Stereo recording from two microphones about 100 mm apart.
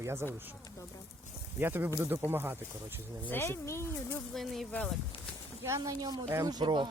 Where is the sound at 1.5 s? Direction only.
20° right (ahead or behind).